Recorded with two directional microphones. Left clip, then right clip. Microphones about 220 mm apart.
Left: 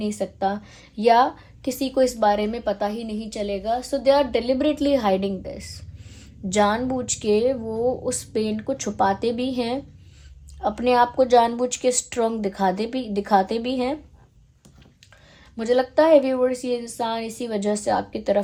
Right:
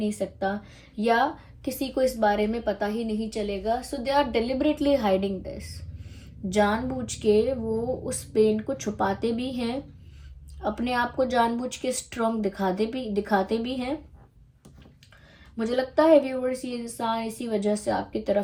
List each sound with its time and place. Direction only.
0.0 s a woman's voice: 30° left (ahead or behind)
15.5 s a woman's voice: 35° left (ahead or behind)